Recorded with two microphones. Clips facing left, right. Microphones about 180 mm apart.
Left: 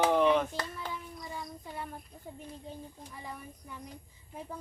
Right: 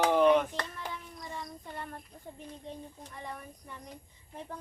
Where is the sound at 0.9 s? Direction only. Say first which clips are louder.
Left 1 dB; 5° left (ahead or behind).